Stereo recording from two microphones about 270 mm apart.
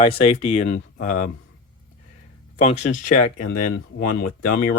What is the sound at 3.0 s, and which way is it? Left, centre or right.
Speech, left.